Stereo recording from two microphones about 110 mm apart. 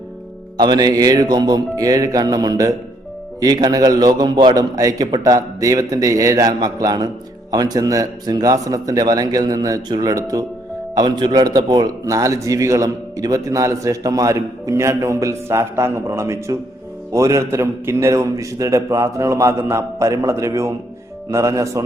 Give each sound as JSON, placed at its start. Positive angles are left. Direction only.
{"t": 0.5, "sound": "a man's voice", "side_deg": -40}